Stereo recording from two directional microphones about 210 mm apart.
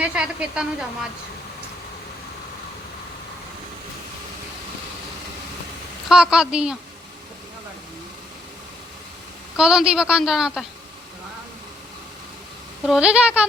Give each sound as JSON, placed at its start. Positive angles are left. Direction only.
{"t": 0.0, "sound": "a woman's voice", "side_deg": -5}
{"t": 6.1, "sound": "a woman's voice", "side_deg": -5}
{"t": 9.6, "sound": "a woman's voice", "side_deg": -5}
{"t": 12.8, "sound": "a woman's voice", "side_deg": -5}